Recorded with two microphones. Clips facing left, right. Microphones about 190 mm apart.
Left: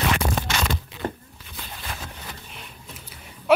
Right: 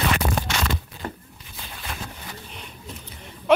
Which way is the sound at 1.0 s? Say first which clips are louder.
Left 4 dB; 30° left (ahead or behind).